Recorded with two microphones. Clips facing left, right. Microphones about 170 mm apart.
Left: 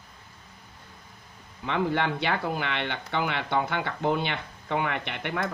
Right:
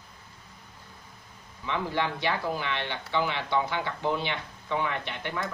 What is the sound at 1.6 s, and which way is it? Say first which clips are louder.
Speech: left 3 dB; 60° left (ahead or behind).